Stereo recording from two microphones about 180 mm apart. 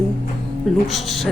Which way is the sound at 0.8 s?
Centre (ahead or behind).